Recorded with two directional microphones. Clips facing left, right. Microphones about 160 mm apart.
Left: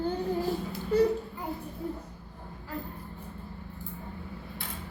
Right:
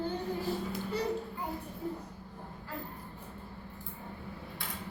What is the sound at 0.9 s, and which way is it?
Speech, 45° left (ahead or behind).